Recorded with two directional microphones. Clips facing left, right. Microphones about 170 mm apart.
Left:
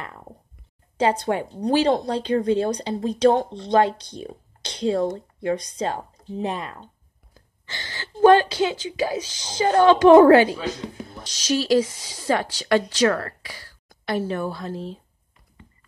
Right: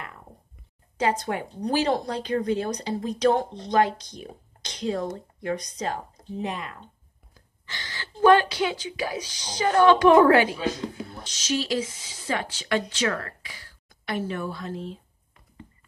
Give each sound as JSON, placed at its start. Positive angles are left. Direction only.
{"t": 0.9, "sound": "speech", "side_deg": 30}